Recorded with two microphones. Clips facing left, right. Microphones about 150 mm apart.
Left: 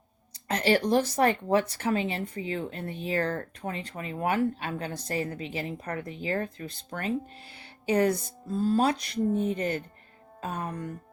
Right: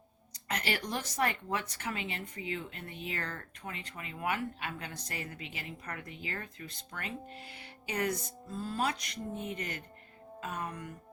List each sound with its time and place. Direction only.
0.4 s speech: 30° left (ahead or behind)